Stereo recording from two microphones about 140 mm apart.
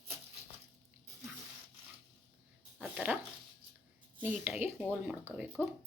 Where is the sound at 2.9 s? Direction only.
10° right (ahead or behind).